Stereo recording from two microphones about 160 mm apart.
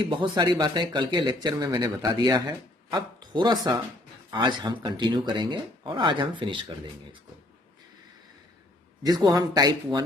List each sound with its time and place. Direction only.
0.0 s speech: 30° right (ahead or behind)
9.0 s speech: 25° right (ahead or behind)